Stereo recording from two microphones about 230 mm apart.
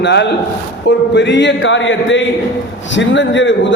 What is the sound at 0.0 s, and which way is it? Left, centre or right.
A man's voice, left.